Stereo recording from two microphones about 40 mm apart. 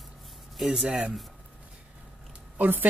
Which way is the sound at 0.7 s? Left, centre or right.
Centre.